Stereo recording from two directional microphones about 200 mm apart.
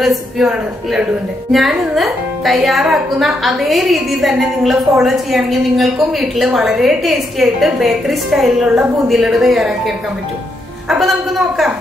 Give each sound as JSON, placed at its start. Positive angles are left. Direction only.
{"t": 0.0, "sound": "speech", "side_deg": 0}